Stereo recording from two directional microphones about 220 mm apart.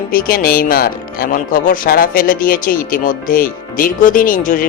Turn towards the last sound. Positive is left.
turn(degrees=35)  # may be behind; listen again after turning